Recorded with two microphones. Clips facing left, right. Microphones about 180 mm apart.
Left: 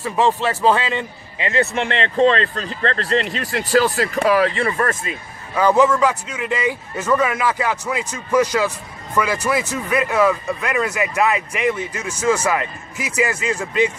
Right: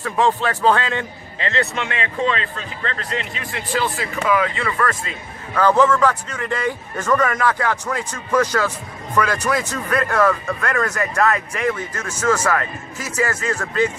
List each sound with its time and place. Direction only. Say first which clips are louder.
0.0 s a man's voice: left 1 dB; 5° left (ahead or behind)
2.1 s speech: left 7 dB; 35° left (ahead or behind)
5.0 s speech: left 2 dB; 10° left (ahead or behind)